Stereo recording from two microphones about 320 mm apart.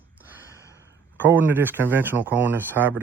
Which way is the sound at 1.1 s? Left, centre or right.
Centre.